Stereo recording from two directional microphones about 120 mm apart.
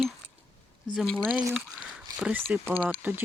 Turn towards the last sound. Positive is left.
turn(degrees=-15)  # may be behind; listen again after turning